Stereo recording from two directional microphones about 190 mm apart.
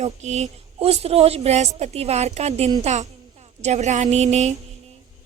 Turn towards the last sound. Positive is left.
turn(degrees=-35)  # may be behind; listen again after turning